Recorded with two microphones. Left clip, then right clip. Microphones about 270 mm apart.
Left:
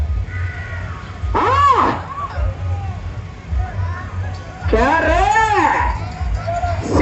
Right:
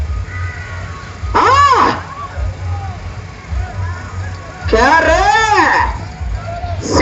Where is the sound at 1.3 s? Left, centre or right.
Right.